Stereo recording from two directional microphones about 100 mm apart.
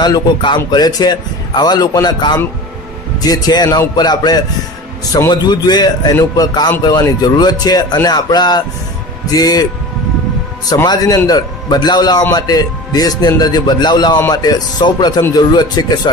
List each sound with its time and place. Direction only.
0.0 s a man's voice: 50° left (ahead or behind)
10.9 s a man's voice: 40° left (ahead or behind)